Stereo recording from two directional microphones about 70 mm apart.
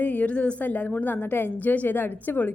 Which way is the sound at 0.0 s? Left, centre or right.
Left.